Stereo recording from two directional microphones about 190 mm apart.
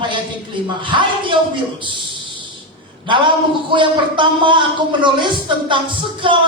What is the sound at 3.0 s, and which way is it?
A woman's voice, 25° right (ahead or behind).